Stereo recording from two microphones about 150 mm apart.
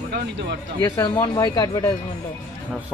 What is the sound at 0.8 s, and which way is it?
Speech, 25° left (ahead or behind).